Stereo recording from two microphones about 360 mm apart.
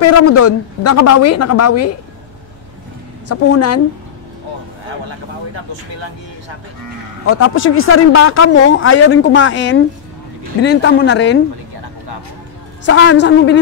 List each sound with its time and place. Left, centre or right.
0.0 s a woman's voice: left
3.3 s a man's voice: left
7.2 s a man's voice: left
12.8 s a man's voice: left